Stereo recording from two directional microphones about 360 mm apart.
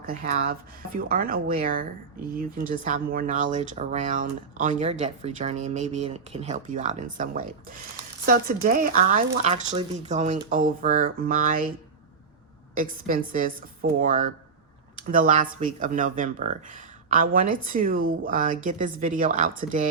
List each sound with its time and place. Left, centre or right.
0.0 s speech: right
12.7 s speech: right